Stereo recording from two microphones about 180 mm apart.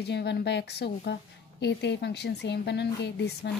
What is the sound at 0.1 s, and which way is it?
Speech, 70° left (ahead or behind).